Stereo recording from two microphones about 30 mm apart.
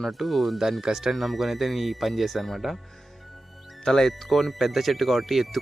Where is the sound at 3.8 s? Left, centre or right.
Centre.